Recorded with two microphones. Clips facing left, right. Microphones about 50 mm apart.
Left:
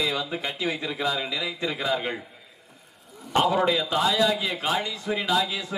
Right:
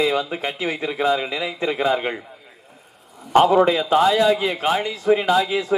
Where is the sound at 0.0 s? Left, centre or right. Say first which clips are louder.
Right 7 dB; right.